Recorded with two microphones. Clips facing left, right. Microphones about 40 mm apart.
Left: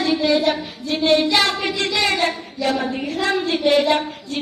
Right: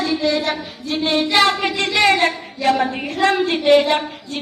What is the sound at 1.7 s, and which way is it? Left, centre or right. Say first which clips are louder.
A woman's voice: right 4 dB; right.